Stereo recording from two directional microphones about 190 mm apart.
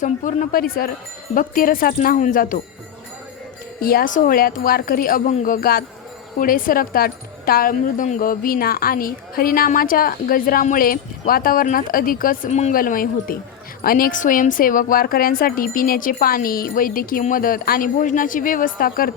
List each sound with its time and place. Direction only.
0.0 s speech: 40° left (ahead or behind)
3.8 s speech: 50° left (ahead or behind)